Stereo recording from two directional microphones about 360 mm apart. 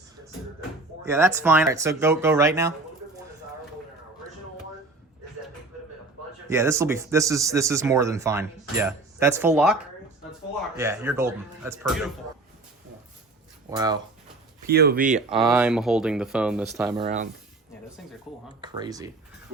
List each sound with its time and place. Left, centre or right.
1.0 s speech: centre
6.5 s speech: centre
13.7 s speech: centre
14.7 s speech: right
15.3 s speech: centre
17.0 s speech: centre
18.6 s speech: centre